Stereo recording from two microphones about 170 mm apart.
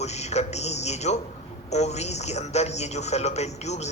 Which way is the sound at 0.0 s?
40° left (ahead or behind).